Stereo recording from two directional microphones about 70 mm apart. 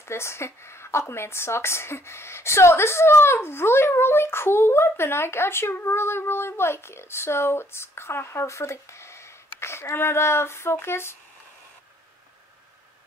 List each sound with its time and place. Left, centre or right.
0.0 s speech: left